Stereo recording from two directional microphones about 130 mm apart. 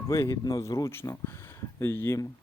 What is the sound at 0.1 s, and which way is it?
Speech, 25° left (ahead or behind).